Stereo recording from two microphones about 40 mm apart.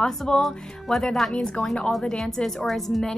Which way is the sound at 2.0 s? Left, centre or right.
Centre.